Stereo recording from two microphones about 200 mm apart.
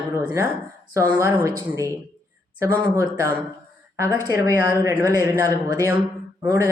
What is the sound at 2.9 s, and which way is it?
Speech, 15° right (ahead or behind).